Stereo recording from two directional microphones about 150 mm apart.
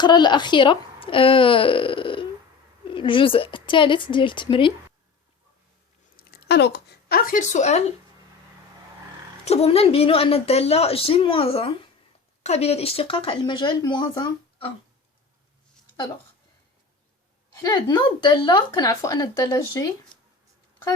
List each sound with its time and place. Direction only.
0.0 s a woman's voice: 30° left (ahead or behind)
6.1 s a sound: 90° left
7.1 s speech: 75° left (ahead or behind); by 7.9 s 50° left (ahead or behind)
9.4 s a woman's voice: 45° left (ahead or behind)
17.6 s speech: 25° left (ahead or behind)